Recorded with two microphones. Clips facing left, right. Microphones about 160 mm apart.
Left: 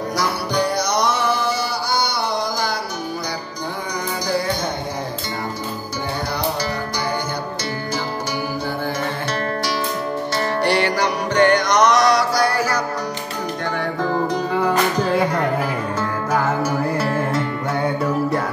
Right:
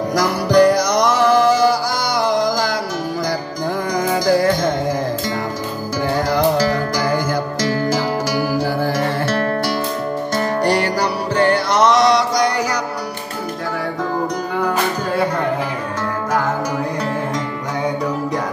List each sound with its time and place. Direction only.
0.1 s music: 90° right
4.1 s music: 45° right (ahead or behind)
6.3 s music: 90° right
10.3 s music: 40° right (ahead or behind); by 12.4 s 25° right (ahead or behind)
14.5 s music: centre (ahead or behind)
17.8 s music: centre (ahead or behind)